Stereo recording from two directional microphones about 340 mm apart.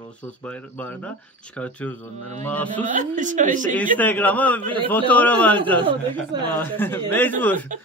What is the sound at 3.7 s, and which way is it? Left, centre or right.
A man's voice, centre.